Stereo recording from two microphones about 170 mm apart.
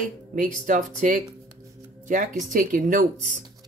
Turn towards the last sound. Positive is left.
turn(degrees=-55)  # may be behind; listen again after turning